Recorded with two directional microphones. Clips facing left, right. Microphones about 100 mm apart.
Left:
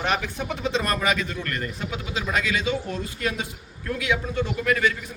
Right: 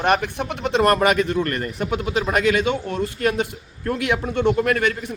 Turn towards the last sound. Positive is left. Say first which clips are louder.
# right 5 dB
turn(degrees=-50)  # may be behind; listen again after turning